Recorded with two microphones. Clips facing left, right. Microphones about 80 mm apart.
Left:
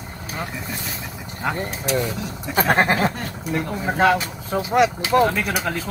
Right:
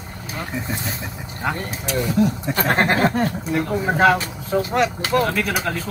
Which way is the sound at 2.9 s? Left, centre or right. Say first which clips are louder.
Right 4 dB; right.